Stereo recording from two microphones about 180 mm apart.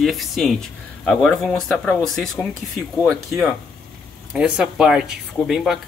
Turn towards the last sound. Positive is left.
turn(degrees=0)  # may be behind; listen again after turning